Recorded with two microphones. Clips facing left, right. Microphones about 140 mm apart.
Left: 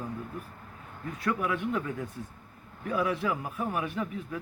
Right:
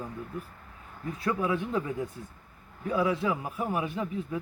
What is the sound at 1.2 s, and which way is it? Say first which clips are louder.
Speech: right 1 dB; 25° right (ahead or behind).